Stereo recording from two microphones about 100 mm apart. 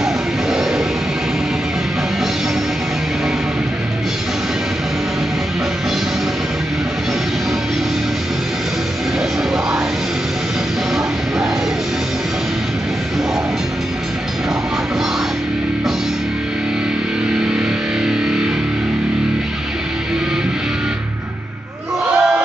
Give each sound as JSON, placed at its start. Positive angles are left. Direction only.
{"t": 0.0, "sound": "music", "side_deg": -5}
{"t": 18.0, "sound": "music", "side_deg": -5}
{"t": 22.0, "sound": "a sound", "side_deg": -5}